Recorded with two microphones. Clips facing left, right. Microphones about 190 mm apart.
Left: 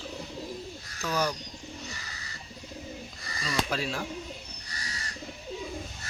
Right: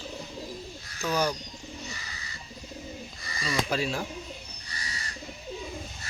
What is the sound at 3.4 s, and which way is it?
Speech, 10° right (ahead or behind).